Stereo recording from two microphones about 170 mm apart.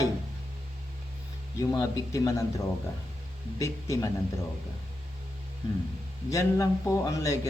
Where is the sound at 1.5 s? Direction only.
20° left (ahead or behind).